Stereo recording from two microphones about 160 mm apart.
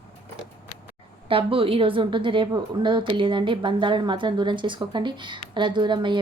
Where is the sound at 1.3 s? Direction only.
35° right (ahead or behind).